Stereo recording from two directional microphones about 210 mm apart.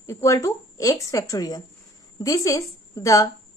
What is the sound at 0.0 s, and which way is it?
Speech, 15° left (ahead or behind).